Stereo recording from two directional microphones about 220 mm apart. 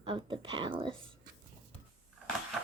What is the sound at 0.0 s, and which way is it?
Speech, 25° right (ahead or behind).